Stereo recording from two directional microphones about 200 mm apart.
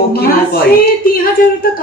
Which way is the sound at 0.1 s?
50° left (ahead or behind).